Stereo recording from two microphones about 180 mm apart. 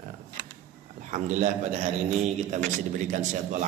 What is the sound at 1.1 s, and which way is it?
Speech, 45° right (ahead or behind).